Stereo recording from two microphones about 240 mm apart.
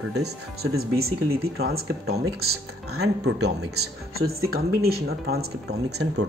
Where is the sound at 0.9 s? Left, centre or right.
Right.